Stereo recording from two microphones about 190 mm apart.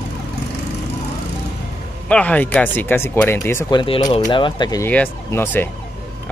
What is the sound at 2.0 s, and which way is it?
Speech, 5° left (ahead or behind).